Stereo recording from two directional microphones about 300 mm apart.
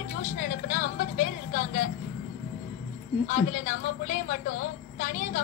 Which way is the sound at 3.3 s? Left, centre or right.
Left.